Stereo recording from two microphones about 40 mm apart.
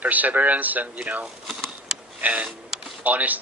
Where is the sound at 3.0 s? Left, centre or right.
Right.